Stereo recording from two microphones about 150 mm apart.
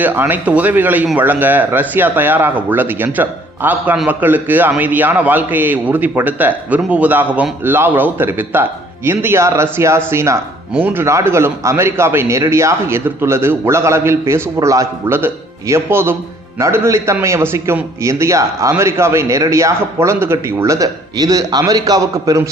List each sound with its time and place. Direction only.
0.0 s a man's voice: 10° right (ahead or behind)